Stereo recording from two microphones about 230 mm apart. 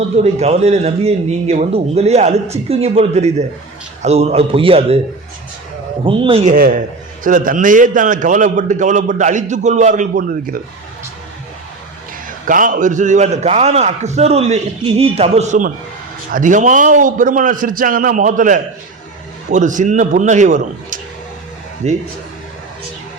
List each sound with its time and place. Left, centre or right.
0.2 s a man's voice: right
6.1 s a man's voice: right
12.5 s a man's voice: right